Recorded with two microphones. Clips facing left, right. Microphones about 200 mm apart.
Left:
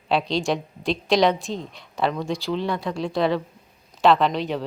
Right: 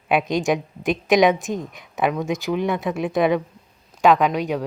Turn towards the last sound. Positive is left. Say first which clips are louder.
# right 2 dB
turn(degrees=-10)  # may be behind; listen again after turning